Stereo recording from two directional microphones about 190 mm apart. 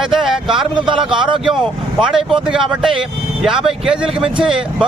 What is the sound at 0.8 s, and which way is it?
Speech, 25° right (ahead or behind).